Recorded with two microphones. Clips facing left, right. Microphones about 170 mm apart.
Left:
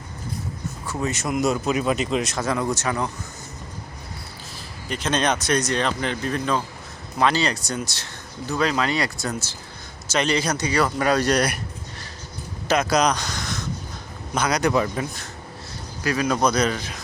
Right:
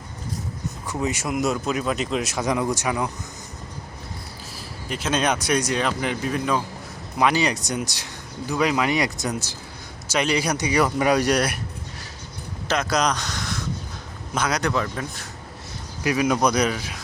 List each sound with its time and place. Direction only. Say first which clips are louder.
1.0 s speech: left 1 dB; 10° right (ahead or behind)
4.9 s speech: even; 5° right (ahead or behind)
12.6 s a man's voice: left 3 dB; 5° left (ahead or behind)
14.7 s speech: left 4 dB; 15° left (ahead or behind)
16.0 s speech: right 1 dB; 15° right (ahead or behind)